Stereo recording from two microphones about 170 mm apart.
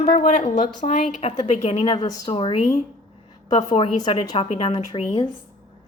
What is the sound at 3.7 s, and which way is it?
Speech, 45° left (ahead or behind).